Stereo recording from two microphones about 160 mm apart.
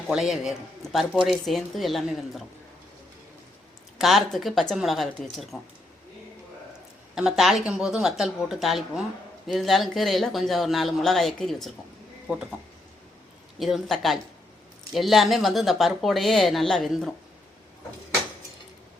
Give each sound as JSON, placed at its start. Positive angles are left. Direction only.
{"t": 0.1, "sound": "speech", "side_deg": 0}
{"t": 3.9, "sound": "speech", "side_deg": 0}
{"t": 7.2, "sound": "speech", "side_deg": 0}
{"t": 13.6, "sound": "speech", "side_deg": 0}